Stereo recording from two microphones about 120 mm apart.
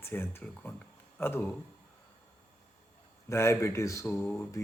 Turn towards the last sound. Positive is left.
turn(degrees=15)  # may be behind; listen again after turning